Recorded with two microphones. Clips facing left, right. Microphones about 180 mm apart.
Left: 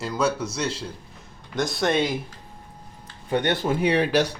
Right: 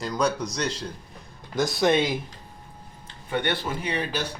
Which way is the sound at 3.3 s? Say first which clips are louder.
Left 3 dB; 45° left (ahead or behind).